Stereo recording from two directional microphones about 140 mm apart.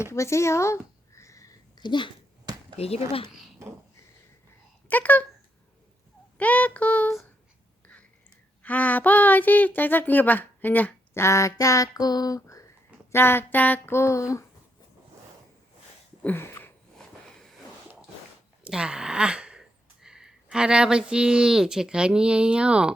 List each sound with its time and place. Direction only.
0.1 s a sound: 20° left (ahead or behind)
2.7 s speech: 45° left (ahead or behind)
4.9 s speech: 10° left (ahead or behind)
6.3 s speech: 10° left (ahead or behind)
8.6 s speech: 10° left (ahead or behind)
16.2 s a sound: 15° left (ahead or behind)
18.6 s speech: 5° right (ahead or behind)